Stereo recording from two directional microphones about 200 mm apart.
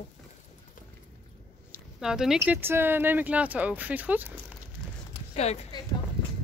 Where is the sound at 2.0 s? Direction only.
5° right (ahead or behind).